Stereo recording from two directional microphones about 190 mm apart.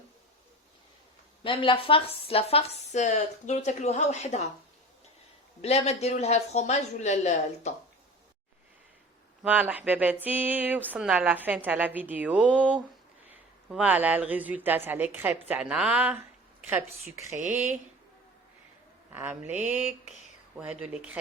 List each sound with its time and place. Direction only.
1.5 s speech: 30° left (ahead or behind)
5.6 s speech: 35° left (ahead or behind)
9.4 s speech: 5° right (ahead or behind)
19.1 s speech: 10° right (ahead or behind)